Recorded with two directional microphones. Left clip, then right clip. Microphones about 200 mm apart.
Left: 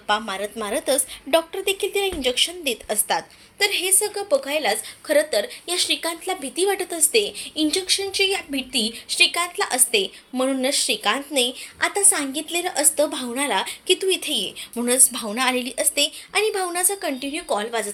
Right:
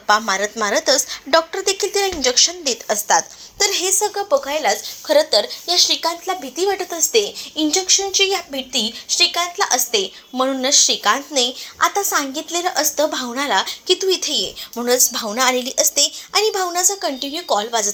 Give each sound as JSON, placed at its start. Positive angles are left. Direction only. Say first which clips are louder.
{"t": 0.1, "sound": "a woman's voice", "louder": "right 7 dB", "side_deg": -5}
{"t": 4.1, "sound": "a woman's voice", "louder": "right 3 dB", "side_deg": 10}
{"t": 5.3, "sound": "speech", "louder": "right 6 dB", "side_deg": 25}
{"t": 6.2, "sound": "a woman's voice", "louder": "right 3 dB", "side_deg": 10}